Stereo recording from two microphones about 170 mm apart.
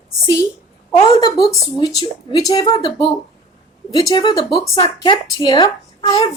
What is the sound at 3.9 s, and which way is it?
A woman's voice, 20° left (ahead or behind).